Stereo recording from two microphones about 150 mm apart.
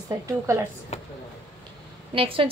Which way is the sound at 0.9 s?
50° left (ahead or behind).